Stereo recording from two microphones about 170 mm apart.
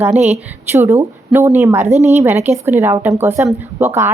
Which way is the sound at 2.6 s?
15° right (ahead or behind).